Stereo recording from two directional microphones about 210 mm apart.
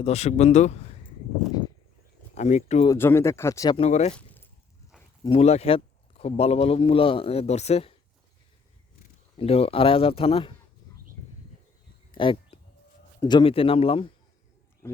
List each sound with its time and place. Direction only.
0.0 s speech: 30° left (ahead or behind)
2.3 s speech: 35° left (ahead or behind)
2.9 s speech: 10° left (ahead or behind)
3.8 s speech: 30° left (ahead or behind)
4.1 s keys jangling: 5° left (ahead or behind)
5.2 s a man's voice: 30° left (ahead or behind)
9.4 s a man's voice: 30° left (ahead or behind)
12.1 s a sound: 25° left (ahead or behind)
13.1 s a man's voice: 20° left (ahead or behind)
14.8 s a sound: 10° left (ahead or behind)